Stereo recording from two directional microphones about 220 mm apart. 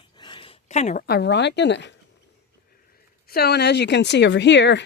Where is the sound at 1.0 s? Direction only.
50° left (ahead or behind).